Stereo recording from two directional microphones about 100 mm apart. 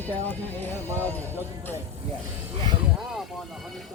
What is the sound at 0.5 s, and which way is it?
Speech, 20° left (ahead or behind).